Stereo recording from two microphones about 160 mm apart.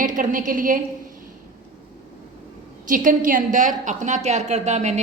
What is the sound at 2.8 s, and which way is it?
A woman's voice, 55° right (ahead or behind).